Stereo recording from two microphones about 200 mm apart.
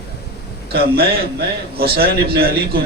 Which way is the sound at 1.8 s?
50° right (ahead or behind).